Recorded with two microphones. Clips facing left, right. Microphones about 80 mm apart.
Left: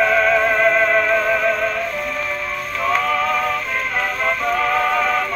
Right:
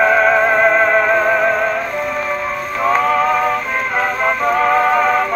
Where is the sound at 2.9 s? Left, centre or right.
Centre.